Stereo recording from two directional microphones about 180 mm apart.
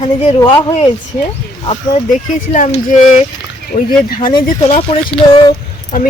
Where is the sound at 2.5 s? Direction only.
40° left (ahead or behind).